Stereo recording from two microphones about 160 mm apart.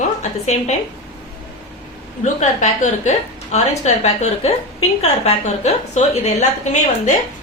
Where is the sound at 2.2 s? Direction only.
45° left (ahead or behind).